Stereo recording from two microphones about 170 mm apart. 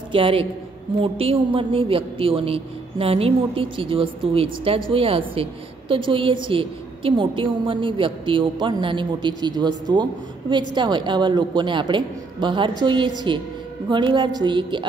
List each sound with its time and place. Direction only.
0.1 s a woman's voice: 30° right (ahead or behind)